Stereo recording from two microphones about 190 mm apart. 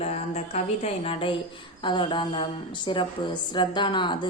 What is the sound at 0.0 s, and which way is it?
A woman's voice, 35° left (ahead or behind).